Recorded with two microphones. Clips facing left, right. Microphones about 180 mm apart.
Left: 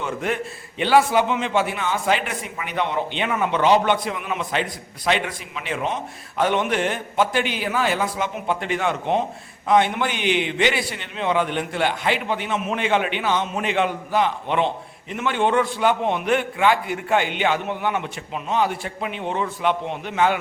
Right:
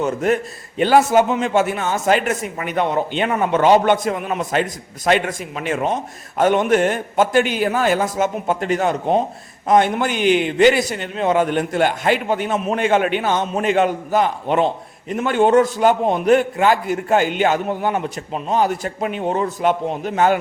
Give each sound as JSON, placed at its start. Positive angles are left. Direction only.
{"t": 0.0, "sound": "a man's voice", "side_deg": -40}